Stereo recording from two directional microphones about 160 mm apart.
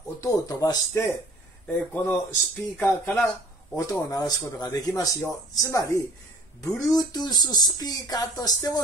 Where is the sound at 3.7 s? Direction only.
25° left (ahead or behind).